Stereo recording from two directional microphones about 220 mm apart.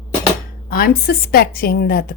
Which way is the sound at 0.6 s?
40° left (ahead or behind).